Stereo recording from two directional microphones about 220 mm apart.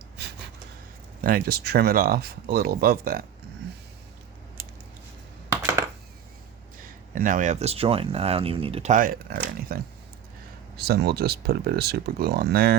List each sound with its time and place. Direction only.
1.2 s speech: 40° right (ahead or behind)
6.7 s speech: 40° right (ahead or behind)